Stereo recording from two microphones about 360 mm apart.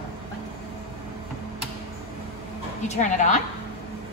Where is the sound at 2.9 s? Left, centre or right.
Centre.